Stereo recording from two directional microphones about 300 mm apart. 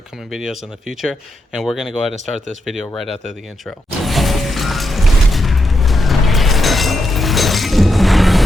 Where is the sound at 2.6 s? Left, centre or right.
Centre.